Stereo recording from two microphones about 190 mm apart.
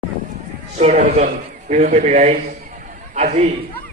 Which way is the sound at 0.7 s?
35° right (ahead or behind).